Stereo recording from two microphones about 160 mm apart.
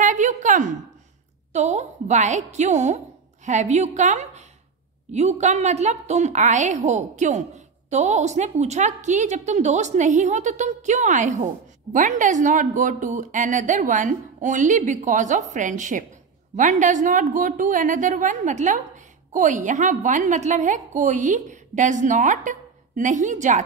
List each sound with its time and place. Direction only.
0.0 s a woman's voice: 50° right (ahead or behind)